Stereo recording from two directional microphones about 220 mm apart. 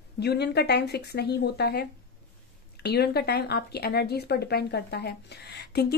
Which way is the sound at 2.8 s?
45° left (ahead or behind).